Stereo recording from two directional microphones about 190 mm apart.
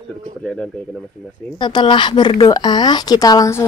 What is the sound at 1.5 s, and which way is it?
Speech, 25° left (ahead or behind).